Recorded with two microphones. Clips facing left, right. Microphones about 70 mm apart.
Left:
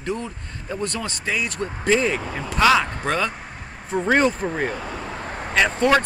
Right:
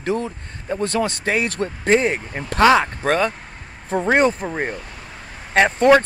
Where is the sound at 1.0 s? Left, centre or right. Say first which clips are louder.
Right 5 dB; right.